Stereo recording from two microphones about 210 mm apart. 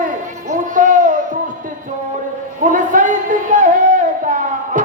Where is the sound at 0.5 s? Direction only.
40° right (ahead or behind).